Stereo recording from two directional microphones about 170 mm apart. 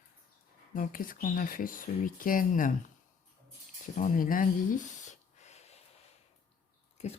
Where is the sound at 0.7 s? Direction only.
55° left (ahead or behind).